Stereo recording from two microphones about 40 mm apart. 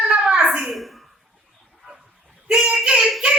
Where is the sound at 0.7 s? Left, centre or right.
Centre.